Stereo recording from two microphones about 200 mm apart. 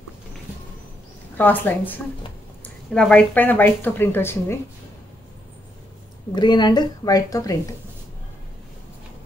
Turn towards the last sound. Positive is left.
turn(degrees=15)  # may be behind; listen again after turning